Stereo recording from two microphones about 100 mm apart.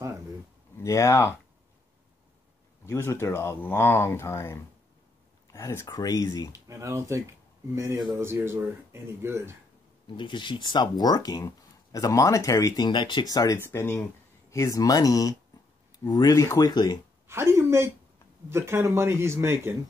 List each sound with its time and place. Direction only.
0.7 s speech: 30° left (ahead or behind)
2.9 s speech: 25° left (ahead or behind)
6.5 s speech: 30° right (ahead or behind)
8.2 s speech: 25° right (ahead or behind)
10.0 s speech: 50° left (ahead or behind)
13.6 s speech: 25° left (ahead or behind)
16.7 s speech: 45° left (ahead or behind)
17.3 s a sound: 25° right (ahead or behind)
18.5 s speech: 25° right (ahead or behind)